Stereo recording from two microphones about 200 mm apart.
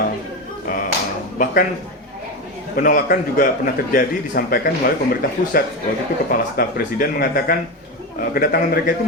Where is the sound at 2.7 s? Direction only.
45° left (ahead or behind).